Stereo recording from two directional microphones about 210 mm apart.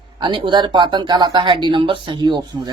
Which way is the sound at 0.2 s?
20° right (ahead or behind).